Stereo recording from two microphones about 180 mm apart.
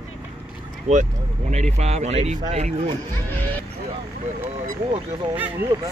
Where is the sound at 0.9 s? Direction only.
40° right (ahead or behind).